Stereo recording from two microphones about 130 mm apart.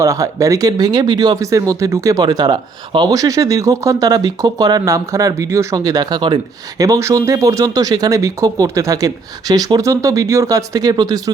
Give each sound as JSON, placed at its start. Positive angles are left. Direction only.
{"t": 0.0, "sound": "speech", "side_deg": -25}